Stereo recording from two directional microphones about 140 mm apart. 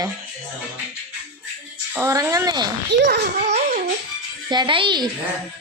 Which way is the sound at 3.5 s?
50° right (ahead or behind).